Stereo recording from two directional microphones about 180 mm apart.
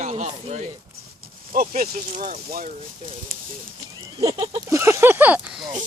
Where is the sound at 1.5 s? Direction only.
50° right (ahead or behind).